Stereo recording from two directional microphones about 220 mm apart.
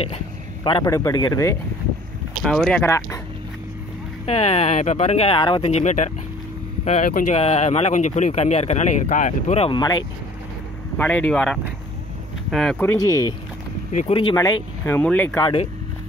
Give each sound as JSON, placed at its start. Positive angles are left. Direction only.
{"t": 0.7, "sound": "speech", "side_deg": 20}
{"t": 2.4, "sound": "speech", "side_deg": 0}
{"t": 4.3, "sound": "speech", "side_deg": 30}
{"t": 11.0, "sound": "speech", "side_deg": 5}
{"t": 13.9, "sound": "speech", "side_deg": 25}
{"t": 15.4, "sound": "speech", "side_deg": 25}